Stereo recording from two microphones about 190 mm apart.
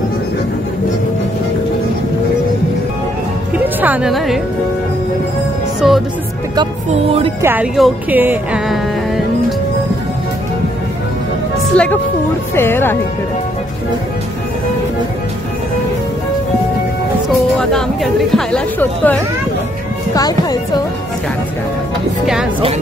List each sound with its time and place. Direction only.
3.5 s music: 10° right (ahead or behind)
5.8 s music: centre (ahead or behind)
6.5 s speech: 25° right (ahead or behind)
7.4 s speech: 5° right (ahead or behind)
11.7 s speech: 5° left (ahead or behind)
17.6 s speech: centre (ahead or behind)
20.2 s speech: 20° left (ahead or behind)
22.2 s speech: 5° right (ahead or behind)